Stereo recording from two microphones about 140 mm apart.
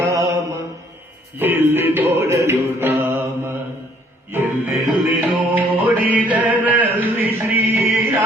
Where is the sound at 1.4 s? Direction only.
15° right (ahead or behind).